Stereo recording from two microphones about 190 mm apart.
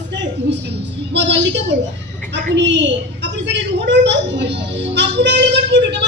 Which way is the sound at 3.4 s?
65° right (ahead or behind).